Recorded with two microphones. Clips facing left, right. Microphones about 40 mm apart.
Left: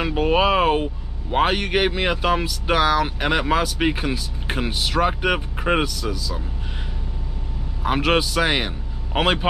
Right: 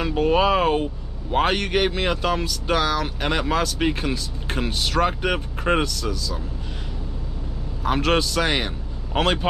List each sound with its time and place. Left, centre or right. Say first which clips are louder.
0.0 s a sound: even; centre
1.3 s speech: left 1 dB; centre
7.8 s a man's voice: left 1 dB; centre